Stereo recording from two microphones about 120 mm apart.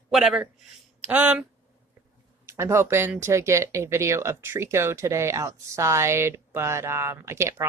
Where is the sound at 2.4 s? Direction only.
20° right (ahead or behind).